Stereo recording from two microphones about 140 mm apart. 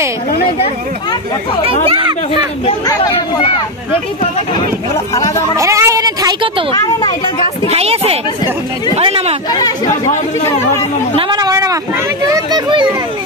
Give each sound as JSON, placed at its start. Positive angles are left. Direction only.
{"t": 1.9, "sound": "speech", "side_deg": -35}
{"t": 3.0, "sound": "speech", "side_deg": 40}
{"t": 4.9, "sound": "speech", "side_deg": 20}
{"t": 5.6, "sound": "a woman's voice", "side_deg": -20}
{"t": 6.7, "sound": "speech", "side_deg": 25}
{"t": 7.7, "sound": "a woman's voice", "side_deg": -45}
{"t": 9.5, "sound": "speech", "side_deg": 30}
{"t": 11.1, "sound": "a woman's voice", "side_deg": -30}